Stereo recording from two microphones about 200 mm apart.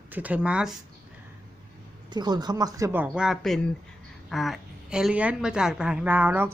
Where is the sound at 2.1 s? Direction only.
20° right (ahead or behind).